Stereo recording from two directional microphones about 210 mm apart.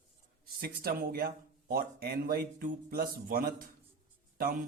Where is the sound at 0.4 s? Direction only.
45° right (ahead or behind).